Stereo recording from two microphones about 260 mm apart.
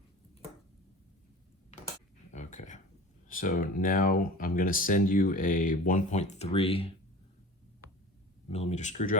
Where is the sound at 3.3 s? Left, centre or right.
Left.